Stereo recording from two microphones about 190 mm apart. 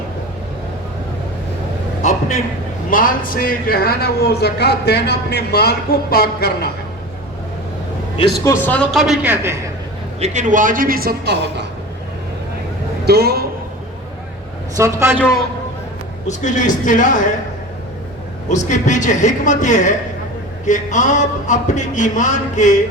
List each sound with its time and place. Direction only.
2.0 s a sound: 40° left (ahead or behind)
2.9 s a man's voice: 45° left (ahead or behind)
8.4 s a man's voice: 10° left (ahead or behind); by 9.6 s 10° right (ahead or behind)
10.2 s a man's voice: 35° right (ahead or behind); by 11.6 s 55° right (ahead or behind)
13.1 s a man's voice: 55° right (ahead or behind)
14.8 s a man's voice: 15° right (ahead or behind)
16.2 s a man's voice: 40° left (ahead or behind)
18.4 s a man's voice: 40° left (ahead or behind)